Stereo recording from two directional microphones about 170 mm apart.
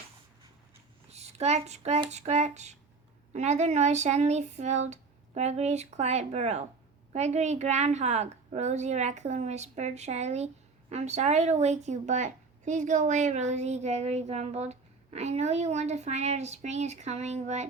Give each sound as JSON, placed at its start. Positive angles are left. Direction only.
{"t": 1.1, "sound": "a woman's voice", "side_deg": -40}